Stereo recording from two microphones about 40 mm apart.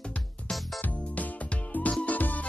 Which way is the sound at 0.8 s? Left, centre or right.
Left.